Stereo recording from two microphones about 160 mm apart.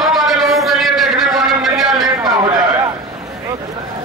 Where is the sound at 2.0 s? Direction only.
25° right (ahead or behind).